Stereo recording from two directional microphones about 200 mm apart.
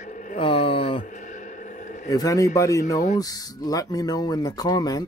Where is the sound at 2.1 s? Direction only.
15° left (ahead or behind).